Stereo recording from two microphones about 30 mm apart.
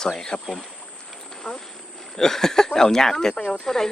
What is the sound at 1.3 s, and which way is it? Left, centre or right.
Insect, centre.